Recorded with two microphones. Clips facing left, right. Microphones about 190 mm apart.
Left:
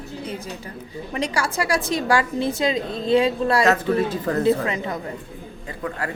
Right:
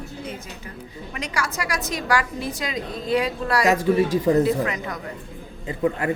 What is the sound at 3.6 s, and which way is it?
Speech, 10° right (ahead or behind).